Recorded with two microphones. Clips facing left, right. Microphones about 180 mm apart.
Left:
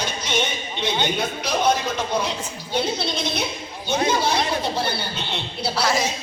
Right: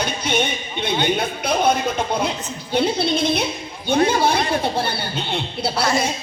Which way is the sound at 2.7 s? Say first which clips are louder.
Right 5 dB; 60° right (ahead or behind).